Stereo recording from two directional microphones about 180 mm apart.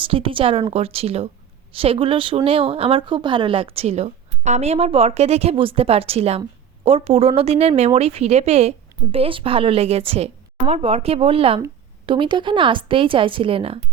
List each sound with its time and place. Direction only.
0.0 s a woman's voice: 30° right (ahead or behind)